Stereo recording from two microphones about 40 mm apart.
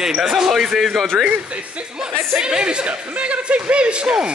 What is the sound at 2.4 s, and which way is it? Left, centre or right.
Speech, right.